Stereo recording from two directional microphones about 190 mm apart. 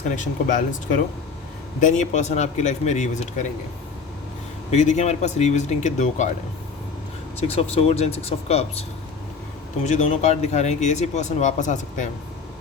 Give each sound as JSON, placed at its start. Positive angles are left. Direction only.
{"t": 0.2, "sound": "speech", "side_deg": 40}
{"t": 1.8, "sound": "speech", "side_deg": 40}
{"t": 4.7, "sound": "speech", "side_deg": 35}
{"t": 7.4, "sound": "speech", "side_deg": 30}
{"t": 9.8, "sound": "speech", "side_deg": 40}